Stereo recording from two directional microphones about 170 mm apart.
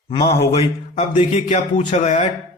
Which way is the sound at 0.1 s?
25° left (ahead or behind).